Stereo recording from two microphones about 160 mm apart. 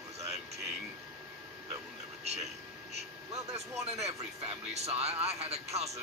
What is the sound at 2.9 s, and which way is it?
Speech, 40° right (ahead or behind).